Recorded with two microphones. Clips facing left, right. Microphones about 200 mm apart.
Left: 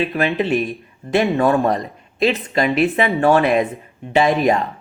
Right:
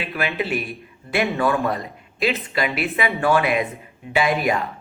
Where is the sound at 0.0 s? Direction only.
35° left (ahead or behind).